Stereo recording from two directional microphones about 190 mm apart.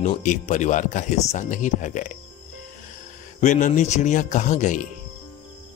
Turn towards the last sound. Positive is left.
turn(degrees=40)  # may be behind; listen again after turning